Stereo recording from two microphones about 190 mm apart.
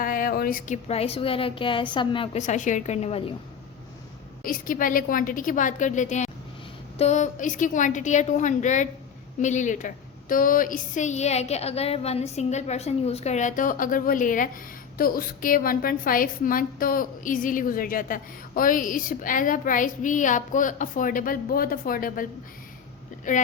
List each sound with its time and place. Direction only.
0.0 s a sound: 50° left (ahead or behind)
0.9 s a woman's voice: 30° left (ahead or behind)
4.4 s a woman's voice: 50° left (ahead or behind)